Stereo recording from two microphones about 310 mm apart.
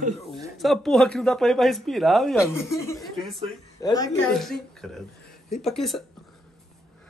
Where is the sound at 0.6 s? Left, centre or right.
Centre.